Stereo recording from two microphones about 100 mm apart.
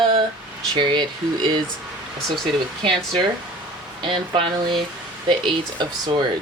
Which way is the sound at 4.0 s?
55° right (ahead or behind).